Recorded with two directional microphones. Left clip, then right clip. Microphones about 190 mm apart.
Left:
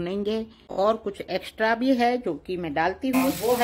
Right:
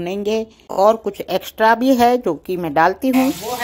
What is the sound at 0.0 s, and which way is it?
Speech, 10° right (ahead or behind).